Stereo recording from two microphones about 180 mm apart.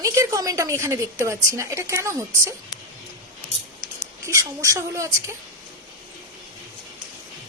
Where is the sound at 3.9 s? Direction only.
15° right (ahead or behind).